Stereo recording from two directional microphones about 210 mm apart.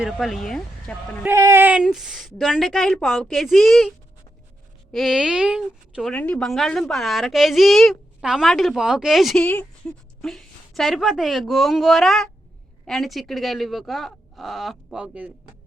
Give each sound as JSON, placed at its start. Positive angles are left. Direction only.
{"t": 0.0, "sound": "a woman's voice", "side_deg": 0}
{"t": 1.3, "sound": "a woman's voice", "side_deg": -15}